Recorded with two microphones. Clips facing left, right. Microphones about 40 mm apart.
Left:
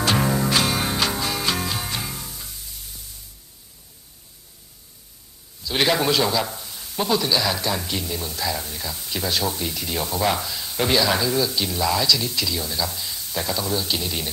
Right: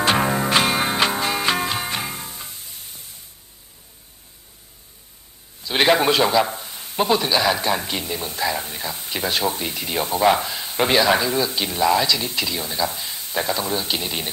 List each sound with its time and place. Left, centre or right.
0.0 s music: right
5.6 s a man's voice: right